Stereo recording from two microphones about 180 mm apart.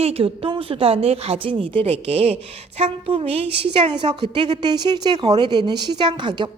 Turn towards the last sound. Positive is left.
turn(degrees=-25)  # may be behind; listen again after turning